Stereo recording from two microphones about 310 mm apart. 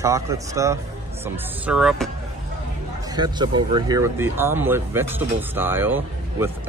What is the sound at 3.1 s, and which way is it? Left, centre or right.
Speech, centre.